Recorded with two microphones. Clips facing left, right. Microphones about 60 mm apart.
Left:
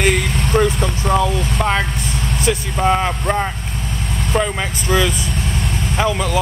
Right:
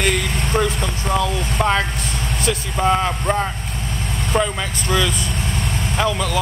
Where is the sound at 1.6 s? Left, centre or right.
Centre.